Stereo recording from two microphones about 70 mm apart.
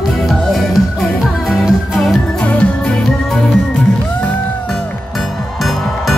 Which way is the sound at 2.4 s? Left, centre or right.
Left.